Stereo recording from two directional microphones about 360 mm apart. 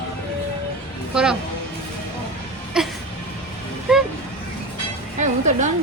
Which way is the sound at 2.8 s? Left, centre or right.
Centre.